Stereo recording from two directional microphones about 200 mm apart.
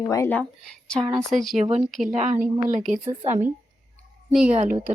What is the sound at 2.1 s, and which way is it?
Speech, 35° right (ahead or behind).